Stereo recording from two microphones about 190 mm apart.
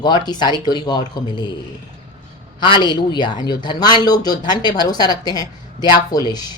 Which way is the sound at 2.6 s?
25° left (ahead or behind).